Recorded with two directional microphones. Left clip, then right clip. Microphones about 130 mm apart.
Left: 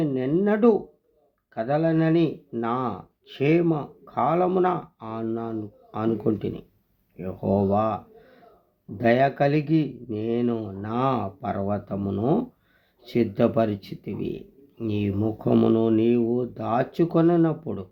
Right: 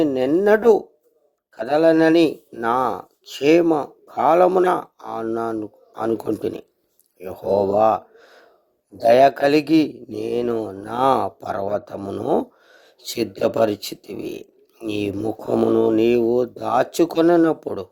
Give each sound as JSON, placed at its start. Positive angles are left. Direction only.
{"t": 0.0, "sound": "a sound", "side_deg": -90}
{"t": 0.3, "sound": "speech", "side_deg": -85}
{"t": 1.6, "sound": "speech", "side_deg": -80}
{"t": 6.0, "sound": "speech", "side_deg": -75}
{"t": 9.0, "sound": "speech", "side_deg": -90}
{"t": 13.0, "sound": "speech", "side_deg": -85}